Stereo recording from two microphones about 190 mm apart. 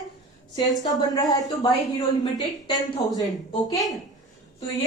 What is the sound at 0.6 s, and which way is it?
A woman's voice, 20° left (ahead or behind).